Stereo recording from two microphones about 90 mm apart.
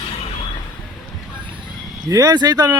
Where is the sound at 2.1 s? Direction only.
40° right (ahead or behind).